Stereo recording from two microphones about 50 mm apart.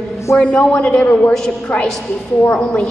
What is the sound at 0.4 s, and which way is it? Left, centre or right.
Speech, left.